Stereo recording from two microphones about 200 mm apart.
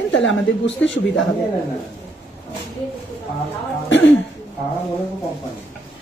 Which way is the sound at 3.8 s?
65° left (ahead or behind).